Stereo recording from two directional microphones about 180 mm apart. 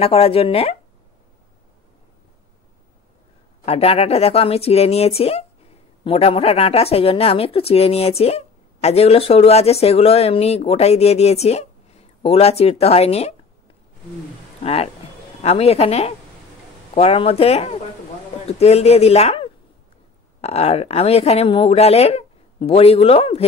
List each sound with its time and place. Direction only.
0.0 s speech: 30° left (ahead or behind)
3.6 s speech: 35° left (ahead or behind)
14.6 s speech: 35° left (ahead or behind)